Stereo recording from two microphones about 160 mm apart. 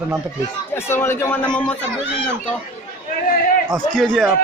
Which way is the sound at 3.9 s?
5° left (ahead or behind).